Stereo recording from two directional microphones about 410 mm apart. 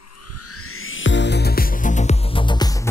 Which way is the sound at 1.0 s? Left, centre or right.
Left.